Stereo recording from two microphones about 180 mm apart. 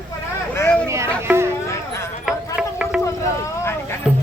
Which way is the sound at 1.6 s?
15° left (ahead or behind).